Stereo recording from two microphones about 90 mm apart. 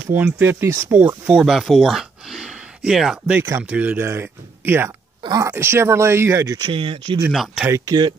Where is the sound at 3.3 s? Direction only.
25° right (ahead or behind).